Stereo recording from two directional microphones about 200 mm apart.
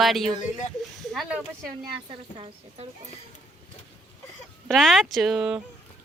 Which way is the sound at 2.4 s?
25° right (ahead or behind).